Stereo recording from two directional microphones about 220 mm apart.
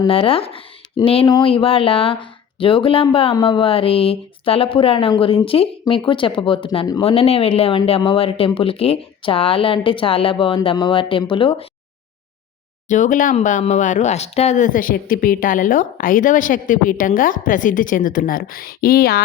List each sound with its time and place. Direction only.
0.0 s speech: 25° left (ahead or behind)
12.9 s speech: 35° left (ahead or behind)